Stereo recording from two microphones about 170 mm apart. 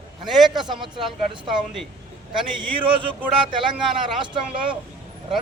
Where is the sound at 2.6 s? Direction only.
30° right (ahead or behind).